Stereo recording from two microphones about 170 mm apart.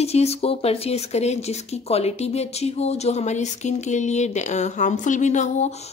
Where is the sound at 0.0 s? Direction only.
40° left (ahead or behind).